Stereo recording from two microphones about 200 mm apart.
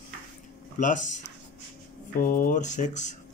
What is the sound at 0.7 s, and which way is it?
Speech, 40° left (ahead or behind).